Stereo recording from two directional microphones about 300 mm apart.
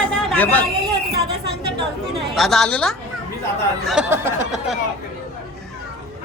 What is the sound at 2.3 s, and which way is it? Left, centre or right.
Speech, centre.